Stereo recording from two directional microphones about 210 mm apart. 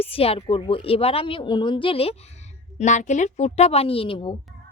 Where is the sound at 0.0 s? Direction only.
25° left (ahead or behind).